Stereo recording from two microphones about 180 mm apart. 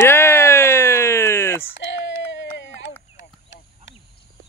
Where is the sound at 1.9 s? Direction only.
90° left.